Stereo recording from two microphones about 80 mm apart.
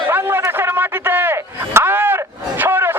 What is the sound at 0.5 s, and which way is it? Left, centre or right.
Chop, right.